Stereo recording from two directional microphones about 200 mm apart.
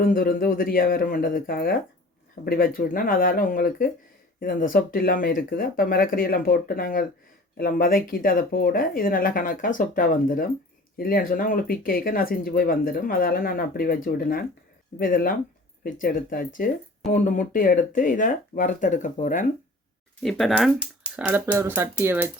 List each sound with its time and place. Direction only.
0.0 s speech: 45° left (ahead or behind)
20.2 s speech: centre (ahead or behind)